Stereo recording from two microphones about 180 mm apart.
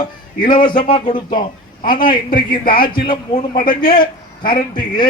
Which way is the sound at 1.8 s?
50° left (ahead or behind).